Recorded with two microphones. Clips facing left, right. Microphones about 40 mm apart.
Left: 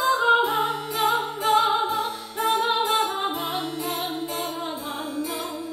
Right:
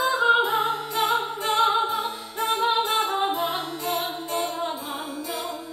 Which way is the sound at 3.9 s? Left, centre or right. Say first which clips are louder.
Right 1 dB; centre.